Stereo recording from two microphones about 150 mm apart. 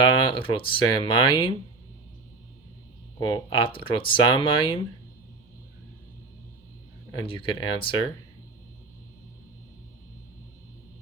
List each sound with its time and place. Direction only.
0.0 s speech: 35° left (ahead or behind)
3.2 s speech: 30° left (ahead or behind)
7.3 s speech: 35° left (ahead or behind)